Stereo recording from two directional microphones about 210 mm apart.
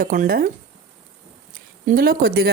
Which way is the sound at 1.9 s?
45° right (ahead or behind).